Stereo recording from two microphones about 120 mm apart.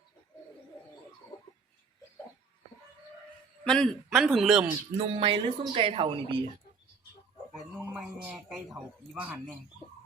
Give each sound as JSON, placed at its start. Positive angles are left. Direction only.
{"t": 3.6, "sound": "a man's voice", "side_deg": 10}
{"t": 4.9, "sound": "speech", "side_deg": -50}
{"t": 7.8, "sound": "a man's voice", "side_deg": -10}